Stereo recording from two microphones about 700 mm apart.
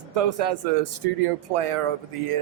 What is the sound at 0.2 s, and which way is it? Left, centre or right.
Speech, right.